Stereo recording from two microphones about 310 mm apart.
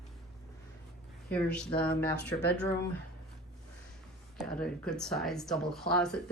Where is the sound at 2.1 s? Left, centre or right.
Left.